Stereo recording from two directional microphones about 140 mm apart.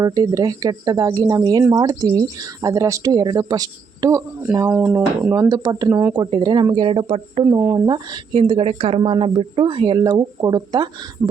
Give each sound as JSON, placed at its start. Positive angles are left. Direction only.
{"t": 0.0, "sound": "speech", "side_deg": -25}
{"t": 4.7, "sound": "speech", "side_deg": -10}
{"t": 5.3, "sound": "speech", "side_deg": -25}
{"t": 5.9, "sound": "speech", "side_deg": -15}
{"t": 6.1, "sound": "speech", "side_deg": -35}
{"t": 7.4, "sound": "speech", "side_deg": -25}
{"t": 11.2, "sound": "a sound", "side_deg": -20}